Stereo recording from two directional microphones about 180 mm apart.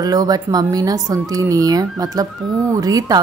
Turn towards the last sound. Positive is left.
turn(degrees=-20)  # may be behind; listen again after turning